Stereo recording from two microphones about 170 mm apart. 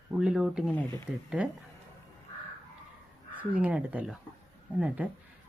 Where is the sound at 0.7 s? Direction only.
15° left (ahead or behind).